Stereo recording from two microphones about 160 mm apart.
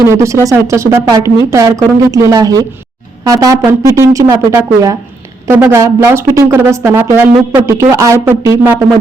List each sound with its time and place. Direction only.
0.1 s speech: 15° right (ahead or behind)